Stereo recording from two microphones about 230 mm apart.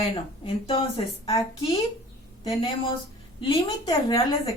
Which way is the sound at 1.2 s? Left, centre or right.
Centre.